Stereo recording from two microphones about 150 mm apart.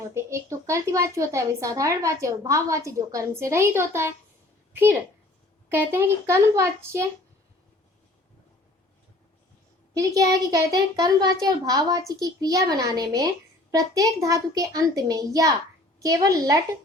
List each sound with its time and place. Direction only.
0.1 s a woman's voice: 20° right (ahead or behind)
9.9 s speech: 20° right (ahead or behind)